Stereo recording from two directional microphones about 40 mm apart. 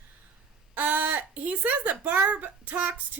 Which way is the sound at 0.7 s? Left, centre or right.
Right.